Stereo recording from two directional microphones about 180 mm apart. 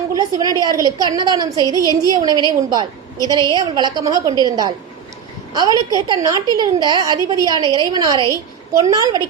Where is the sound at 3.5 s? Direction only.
25° right (ahead or behind).